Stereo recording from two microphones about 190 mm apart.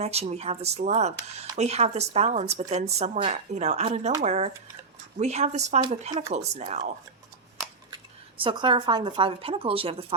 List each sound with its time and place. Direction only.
0.0 s speech: 35° right (ahead or behind)
7.9 s speech: 25° right (ahead or behind)